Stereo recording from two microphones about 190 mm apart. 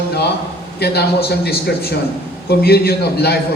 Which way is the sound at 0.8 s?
55° left (ahead or behind).